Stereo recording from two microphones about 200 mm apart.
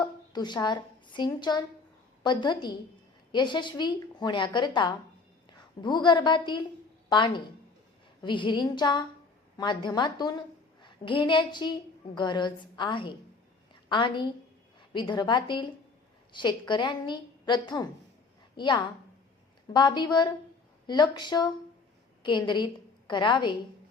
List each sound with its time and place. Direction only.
0.0 s a woman's voice: 20° left (ahead or behind)